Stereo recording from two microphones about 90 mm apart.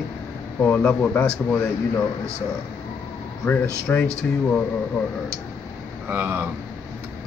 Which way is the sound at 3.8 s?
15° left (ahead or behind).